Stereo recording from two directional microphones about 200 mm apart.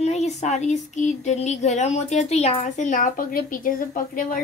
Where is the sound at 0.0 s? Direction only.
35° left (ahead or behind).